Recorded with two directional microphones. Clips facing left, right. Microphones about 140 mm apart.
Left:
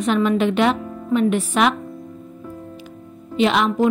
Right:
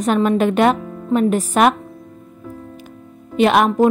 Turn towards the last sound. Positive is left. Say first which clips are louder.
# right 4 dB
turn(degrees=-50)  # may be behind; listen again after turning